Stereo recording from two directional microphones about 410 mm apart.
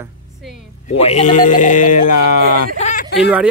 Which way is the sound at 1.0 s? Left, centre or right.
Centre.